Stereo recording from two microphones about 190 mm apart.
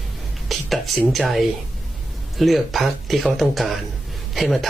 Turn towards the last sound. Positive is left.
turn(degrees=0)  # may be behind; listen again after turning